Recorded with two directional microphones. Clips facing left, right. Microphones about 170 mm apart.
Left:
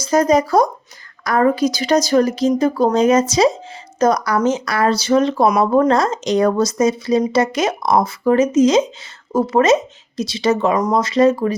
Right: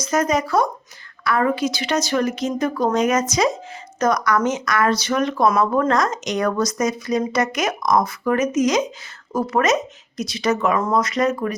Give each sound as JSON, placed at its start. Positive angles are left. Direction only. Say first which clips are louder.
{"t": 0.0, "sound": "speech", "louder": "left 6 dB", "side_deg": 35}
{"t": 10.8, "sound": "speech", "louder": "left 3 dB", "side_deg": 20}
{"t": 11.0, "sound": "speech", "louder": "left 6 dB", "side_deg": 30}